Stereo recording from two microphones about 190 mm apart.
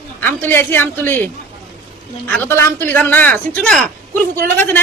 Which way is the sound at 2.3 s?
10° left (ahead or behind).